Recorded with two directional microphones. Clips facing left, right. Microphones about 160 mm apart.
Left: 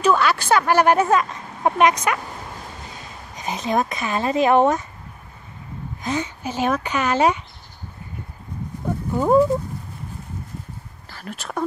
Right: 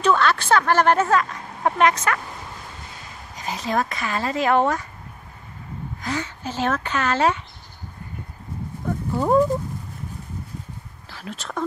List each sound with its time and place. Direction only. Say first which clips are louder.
0.0 s a woman's voice: left 1 dB; 5° left (ahead or behind)
3.3 s speech: left 2 dB; 20° left (ahead or behind)
6.0 s a woman's voice: left 3 dB; 20° left (ahead or behind)
9.1 s a woman's voice: left 2 dB; 5° left (ahead or behind)
11.1 s speech: left 1 dB; centre (ahead or behind)